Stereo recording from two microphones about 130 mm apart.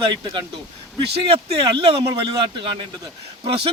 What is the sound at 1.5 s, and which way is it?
Speech, 45° right (ahead or behind).